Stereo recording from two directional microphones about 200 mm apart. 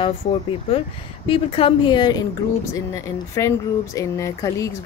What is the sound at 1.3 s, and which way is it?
Speech, 25° left (ahead or behind).